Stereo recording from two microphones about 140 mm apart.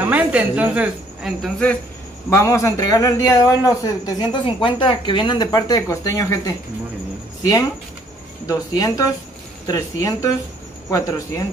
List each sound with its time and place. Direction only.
0.0 s speech: 10° right (ahead or behind)
2.2 s a man's voice: 20° left (ahead or behind)
8.5 s a man's voice: 25° left (ahead or behind)